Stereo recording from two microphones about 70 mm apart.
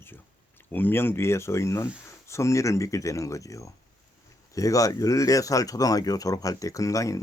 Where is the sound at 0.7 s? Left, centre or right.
Left.